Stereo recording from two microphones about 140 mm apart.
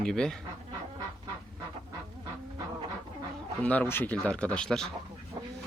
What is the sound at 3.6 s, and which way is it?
Speech, 10° left (ahead or behind).